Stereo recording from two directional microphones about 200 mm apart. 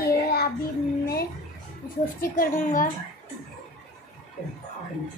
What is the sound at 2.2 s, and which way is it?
Speech, 45° left (ahead or behind).